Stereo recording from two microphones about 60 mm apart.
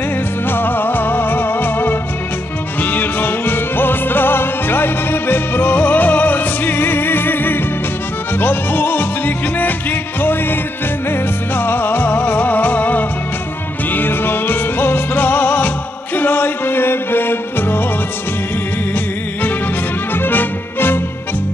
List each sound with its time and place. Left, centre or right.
0.5 s music: left
20.2 s music: left